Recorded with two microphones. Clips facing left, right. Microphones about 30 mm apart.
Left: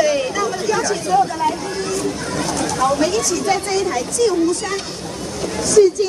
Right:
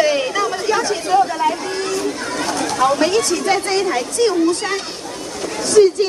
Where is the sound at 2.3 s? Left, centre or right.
Right.